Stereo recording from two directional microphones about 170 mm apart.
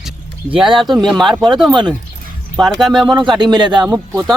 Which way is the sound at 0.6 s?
Centre (ahead or behind).